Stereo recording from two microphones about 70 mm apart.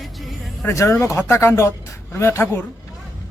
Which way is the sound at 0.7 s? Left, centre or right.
Left.